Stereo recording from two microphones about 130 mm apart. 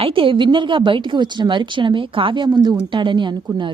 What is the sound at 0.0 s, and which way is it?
A woman's voice, 40° right (ahead or behind).